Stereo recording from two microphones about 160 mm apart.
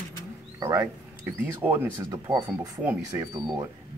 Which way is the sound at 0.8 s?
10° right (ahead or behind).